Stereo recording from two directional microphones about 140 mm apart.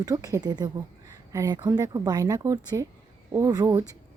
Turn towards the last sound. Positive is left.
turn(degrees=-25)  # may be behind; listen again after turning